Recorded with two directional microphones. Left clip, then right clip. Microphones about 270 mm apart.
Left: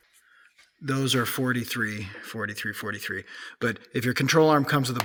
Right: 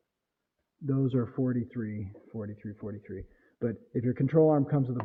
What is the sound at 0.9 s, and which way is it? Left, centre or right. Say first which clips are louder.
Speech: left 6 dB; centre.